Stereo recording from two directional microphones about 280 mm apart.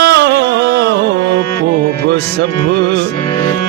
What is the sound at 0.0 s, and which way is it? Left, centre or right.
Music, right.